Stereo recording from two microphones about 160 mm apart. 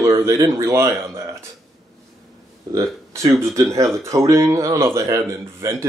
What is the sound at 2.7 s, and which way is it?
Speech, 20° right (ahead or behind).